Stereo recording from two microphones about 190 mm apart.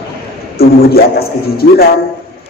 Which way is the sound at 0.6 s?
50° left (ahead or behind).